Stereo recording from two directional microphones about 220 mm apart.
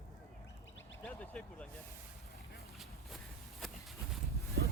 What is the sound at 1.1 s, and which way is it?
Speech, 5° left (ahead or behind).